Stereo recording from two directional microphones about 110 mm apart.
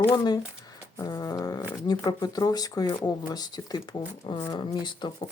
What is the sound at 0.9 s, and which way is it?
Speech, 35° left (ahead or behind).